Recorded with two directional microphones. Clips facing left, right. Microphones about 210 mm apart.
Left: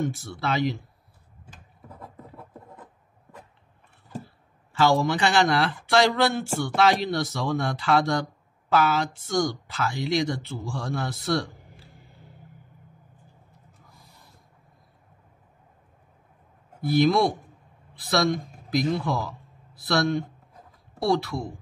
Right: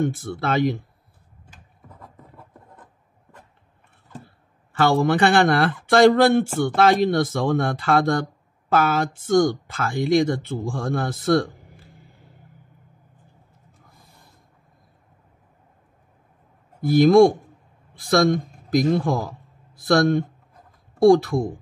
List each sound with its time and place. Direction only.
0.0 s speech: 55° right (ahead or behind)
4.7 s speech: 55° right (ahead or behind)
13.9 s snort: 50° right (ahead or behind)
16.8 s speech: 45° right (ahead or behind)